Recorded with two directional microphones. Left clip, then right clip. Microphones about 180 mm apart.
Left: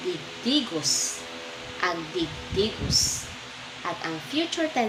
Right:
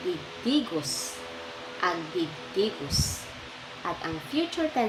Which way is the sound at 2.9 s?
30° right (ahead or behind).